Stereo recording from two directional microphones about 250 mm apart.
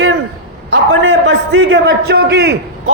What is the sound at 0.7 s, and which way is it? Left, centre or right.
A man's voice, right.